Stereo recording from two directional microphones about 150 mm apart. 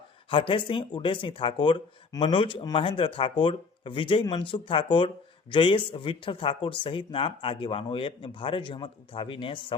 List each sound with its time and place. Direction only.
0.3 s speech: 35° left (ahead or behind)